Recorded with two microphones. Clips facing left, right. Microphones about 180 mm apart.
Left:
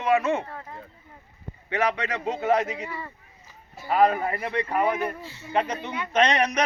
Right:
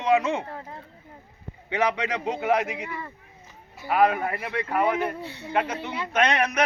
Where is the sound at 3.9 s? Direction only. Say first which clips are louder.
Left 1 dB; 10° right (ahead or behind).